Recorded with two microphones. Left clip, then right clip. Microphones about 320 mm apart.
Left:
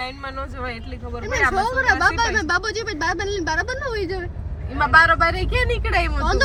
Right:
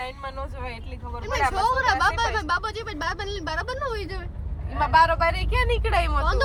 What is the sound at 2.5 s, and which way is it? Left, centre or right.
A woman's voice, right.